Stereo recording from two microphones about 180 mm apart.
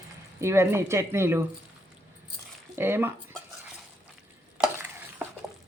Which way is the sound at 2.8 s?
15° right (ahead or behind).